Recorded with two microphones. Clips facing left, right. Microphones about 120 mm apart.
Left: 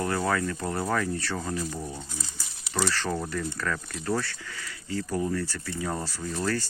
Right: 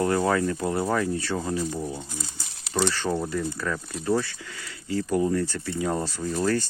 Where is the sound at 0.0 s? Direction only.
25° right (ahead or behind).